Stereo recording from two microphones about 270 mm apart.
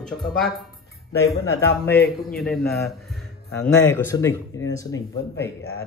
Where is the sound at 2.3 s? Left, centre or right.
Centre.